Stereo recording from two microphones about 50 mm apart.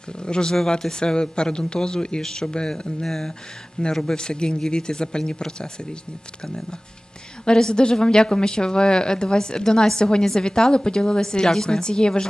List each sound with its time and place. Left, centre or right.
0.2 s a woman's voice: centre
7.4 s a woman's voice: centre